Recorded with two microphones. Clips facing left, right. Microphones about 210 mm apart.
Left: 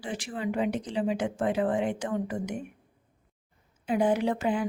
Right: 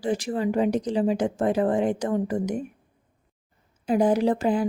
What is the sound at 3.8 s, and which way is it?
Speech, 40° right (ahead or behind).